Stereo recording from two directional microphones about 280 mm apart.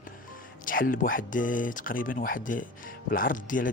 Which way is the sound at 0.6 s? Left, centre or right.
Left.